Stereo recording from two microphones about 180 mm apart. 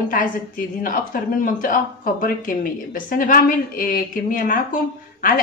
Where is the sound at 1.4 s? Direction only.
50° left (ahead or behind).